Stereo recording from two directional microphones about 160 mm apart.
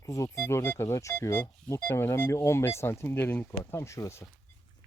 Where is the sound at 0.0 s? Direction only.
20° left (ahead or behind).